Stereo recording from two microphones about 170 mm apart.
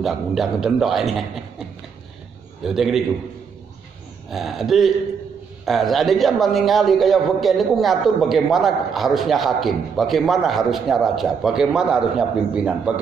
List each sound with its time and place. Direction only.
0.0 s a man's voice: centre (ahead or behind)
2.6 s a man's voice: centre (ahead or behind)
4.3 s a man's voice: centre (ahead or behind)